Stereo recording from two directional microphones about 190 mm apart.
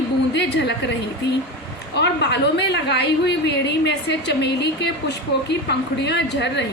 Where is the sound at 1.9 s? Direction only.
65° left (ahead or behind).